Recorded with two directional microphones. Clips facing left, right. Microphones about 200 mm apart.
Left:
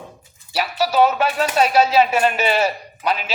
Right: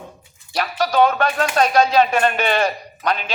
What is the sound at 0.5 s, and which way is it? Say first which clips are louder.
Speech: even; 5° left (ahead or behind).